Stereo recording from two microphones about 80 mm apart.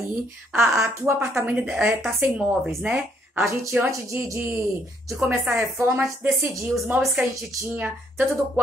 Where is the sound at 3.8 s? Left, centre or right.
Right.